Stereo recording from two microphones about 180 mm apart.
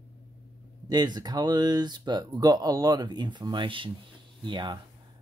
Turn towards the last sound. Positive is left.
turn(degrees=-25)  # may be behind; listen again after turning